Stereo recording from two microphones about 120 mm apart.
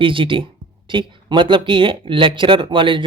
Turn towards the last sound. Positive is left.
turn(degrees=-45)  # may be behind; listen again after turning